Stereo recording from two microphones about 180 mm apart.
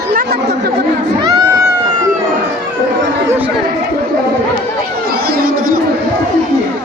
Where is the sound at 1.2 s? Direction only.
20° right (ahead or behind).